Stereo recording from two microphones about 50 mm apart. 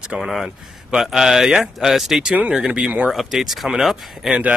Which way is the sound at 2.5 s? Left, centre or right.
Centre.